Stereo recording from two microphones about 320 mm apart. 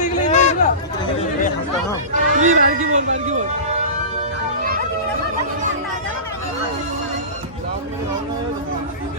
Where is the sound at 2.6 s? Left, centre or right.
Right.